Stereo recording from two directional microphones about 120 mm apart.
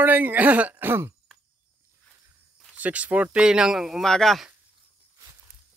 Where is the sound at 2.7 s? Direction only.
10° right (ahead or behind).